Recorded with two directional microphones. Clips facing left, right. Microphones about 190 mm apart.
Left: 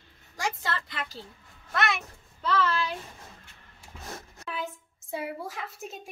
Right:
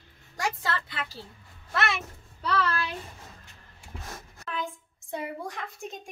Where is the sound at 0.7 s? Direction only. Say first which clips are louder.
Right 1 dB; centre (ahead or behind).